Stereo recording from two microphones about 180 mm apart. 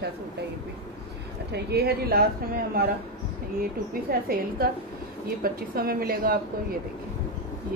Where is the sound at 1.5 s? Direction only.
65° right (ahead or behind).